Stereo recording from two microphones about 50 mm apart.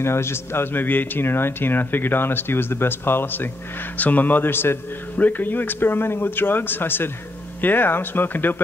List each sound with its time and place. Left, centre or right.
0.0 s a man's voice: left
0.8 s speech: left
4.0 s a man's voice: left
5.1 s speech: left